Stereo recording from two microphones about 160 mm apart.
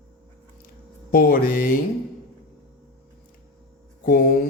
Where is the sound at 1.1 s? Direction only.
65° left (ahead or behind).